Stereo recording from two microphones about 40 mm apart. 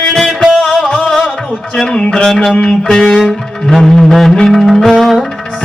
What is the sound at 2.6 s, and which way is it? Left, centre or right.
Music, centre.